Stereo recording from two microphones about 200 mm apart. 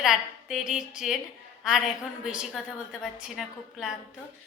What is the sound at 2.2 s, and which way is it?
Speech, 5° right (ahead or behind).